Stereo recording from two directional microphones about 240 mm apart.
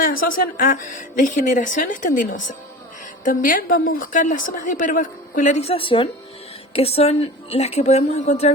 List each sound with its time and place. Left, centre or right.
0.0 s a woman's voice: left